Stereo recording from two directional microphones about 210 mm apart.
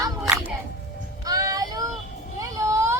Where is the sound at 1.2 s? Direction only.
15° right (ahead or behind).